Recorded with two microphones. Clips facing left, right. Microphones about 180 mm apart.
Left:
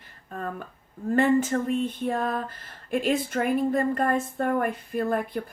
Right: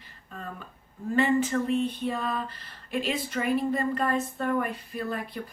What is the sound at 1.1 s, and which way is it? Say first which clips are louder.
Speech: left 3 dB; 50° left (ahead or behind).